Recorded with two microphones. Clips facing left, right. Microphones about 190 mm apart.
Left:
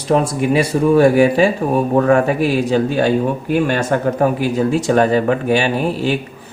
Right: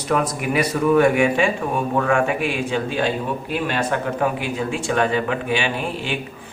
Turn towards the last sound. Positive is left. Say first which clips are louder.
# left 8 dB
turn(degrees=40)  # may be behind; listen again after turning